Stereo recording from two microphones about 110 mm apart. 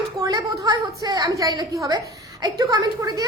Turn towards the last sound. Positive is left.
turn(degrees=-35)  # may be behind; listen again after turning